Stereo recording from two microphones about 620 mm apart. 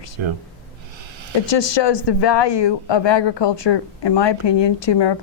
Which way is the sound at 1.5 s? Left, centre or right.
Left.